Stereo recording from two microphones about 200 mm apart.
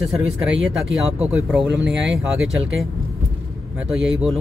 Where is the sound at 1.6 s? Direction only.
60° right (ahead or behind).